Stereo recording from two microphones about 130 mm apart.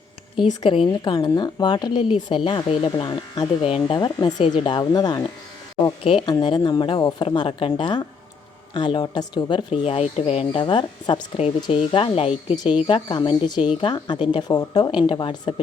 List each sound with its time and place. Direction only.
0.6 s a woman's voice: 40° left (ahead or behind)
3.6 s speech: 45° left (ahead or behind)
3.9 s a woman's voice: 35° left (ahead or behind)
6.0 s speech: 45° left (ahead or behind)
6.2 s a woman's voice: 35° left (ahead or behind); by 10.6 s 50° left (ahead or behind)
10.6 s a woman's voice: 35° left (ahead or behind)
12.9 s a woman's voice: 40° left (ahead or behind)